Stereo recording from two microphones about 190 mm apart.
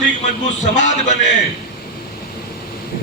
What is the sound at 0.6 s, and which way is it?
Speech, 40° left (ahead or behind).